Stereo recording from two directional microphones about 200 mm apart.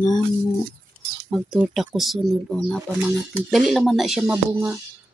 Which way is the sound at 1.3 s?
Centre (ahead or behind).